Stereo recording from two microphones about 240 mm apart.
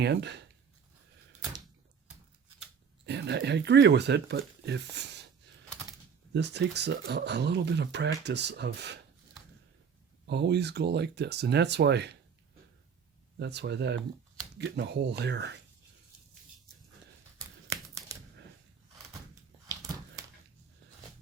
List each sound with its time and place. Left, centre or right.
0.0 s speech: right
3.1 s speech: right
6.3 s speech: right
10.2 s speech: right
13.4 s speech: right
17.7 s a sound: centre
19.6 s a sound: centre